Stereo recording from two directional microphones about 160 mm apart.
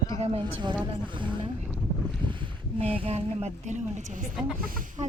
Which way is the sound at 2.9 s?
40° right (ahead or behind).